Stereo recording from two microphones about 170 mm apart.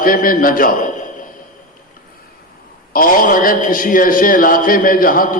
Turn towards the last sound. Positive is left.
turn(degrees=55)  # may be behind; listen again after turning